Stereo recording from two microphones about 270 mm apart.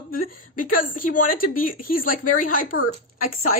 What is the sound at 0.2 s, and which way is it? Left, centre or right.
A woman's voice, left.